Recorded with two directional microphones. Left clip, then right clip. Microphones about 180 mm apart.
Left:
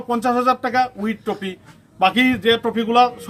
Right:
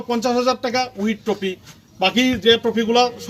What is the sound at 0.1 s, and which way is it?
Speech, 15° left (ahead or behind).